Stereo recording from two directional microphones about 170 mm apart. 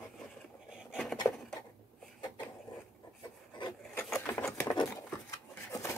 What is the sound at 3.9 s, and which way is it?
Patter, 10° left (ahead or behind).